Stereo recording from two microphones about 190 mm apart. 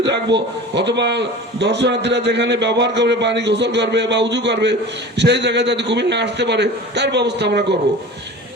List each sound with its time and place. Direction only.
0.3 s a man's voice: 65° right (ahead or behind)